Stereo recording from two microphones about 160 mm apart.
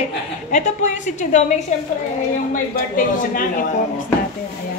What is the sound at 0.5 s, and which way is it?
A woman's voice, 50° left (ahead or behind).